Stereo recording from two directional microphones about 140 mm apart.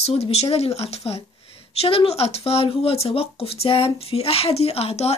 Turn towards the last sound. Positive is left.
turn(degrees=45)  # may be behind; listen again after turning